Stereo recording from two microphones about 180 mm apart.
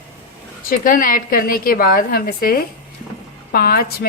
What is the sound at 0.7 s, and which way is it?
A woman's voice, 50° left (ahead or behind).